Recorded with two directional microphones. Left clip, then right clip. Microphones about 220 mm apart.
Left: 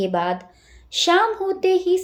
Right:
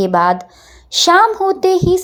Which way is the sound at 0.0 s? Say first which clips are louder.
Right 9 dB; 30° right (ahead or behind).